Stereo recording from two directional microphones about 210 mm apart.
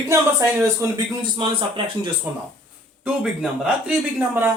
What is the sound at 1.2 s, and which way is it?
Speech, 25° right (ahead or behind).